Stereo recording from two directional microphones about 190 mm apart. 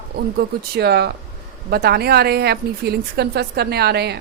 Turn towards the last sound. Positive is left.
turn(degrees=-60)  # may be behind; listen again after turning